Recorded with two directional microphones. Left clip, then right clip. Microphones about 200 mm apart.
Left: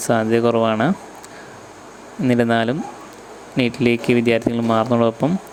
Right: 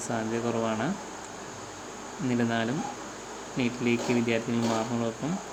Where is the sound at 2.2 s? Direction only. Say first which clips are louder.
Left 12 dB; 50° left (ahead or behind).